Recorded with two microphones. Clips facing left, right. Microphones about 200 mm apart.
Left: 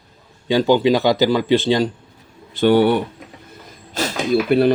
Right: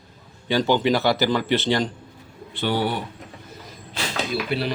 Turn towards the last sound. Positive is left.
turn(degrees=50)  # may be behind; listen again after turning